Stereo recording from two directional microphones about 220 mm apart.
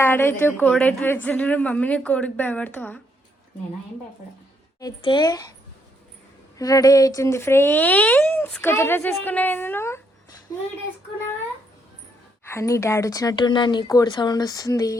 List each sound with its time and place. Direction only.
0.0 s speech: 10° left (ahead or behind)
4.8 s speech: 20° left (ahead or behind)
6.6 s speech: 15° left (ahead or behind)
12.5 s speech: 15° left (ahead or behind)